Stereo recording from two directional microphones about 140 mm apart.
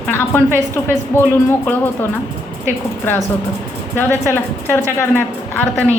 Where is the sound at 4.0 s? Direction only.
15° left (ahead or behind).